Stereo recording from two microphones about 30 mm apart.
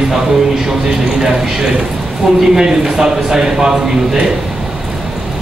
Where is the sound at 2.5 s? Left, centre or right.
Right.